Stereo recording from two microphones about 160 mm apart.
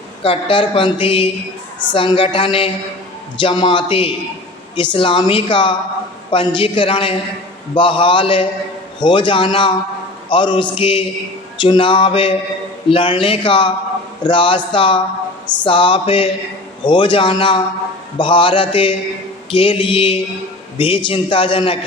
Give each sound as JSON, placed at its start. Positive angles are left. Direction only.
{"t": 0.2, "sound": "a woman's voice", "side_deg": 35}